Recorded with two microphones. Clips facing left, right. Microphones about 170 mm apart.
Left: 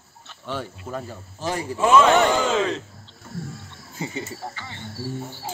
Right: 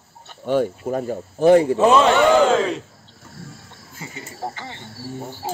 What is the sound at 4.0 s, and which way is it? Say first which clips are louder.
Cricket: left 6 dB; 25° left (ahead or behind).